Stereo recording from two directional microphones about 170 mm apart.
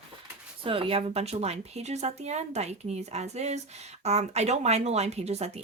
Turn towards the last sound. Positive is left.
turn(degrees=-40)  # may be behind; listen again after turning